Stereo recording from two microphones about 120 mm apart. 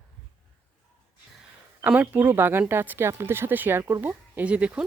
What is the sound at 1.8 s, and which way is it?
Speech, 15° right (ahead or behind).